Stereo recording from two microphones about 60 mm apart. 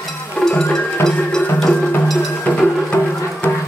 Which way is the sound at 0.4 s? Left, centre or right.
Centre.